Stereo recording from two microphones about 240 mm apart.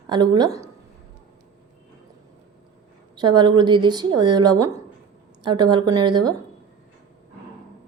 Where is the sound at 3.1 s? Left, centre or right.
Centre.